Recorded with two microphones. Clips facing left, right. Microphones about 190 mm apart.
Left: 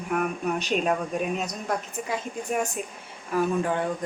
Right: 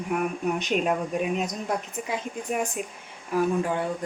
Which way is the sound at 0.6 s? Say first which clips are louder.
Even; 15° right (ahead or behind).